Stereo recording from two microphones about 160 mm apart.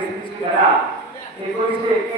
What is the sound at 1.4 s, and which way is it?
Speech, 40° right (ahead or behind).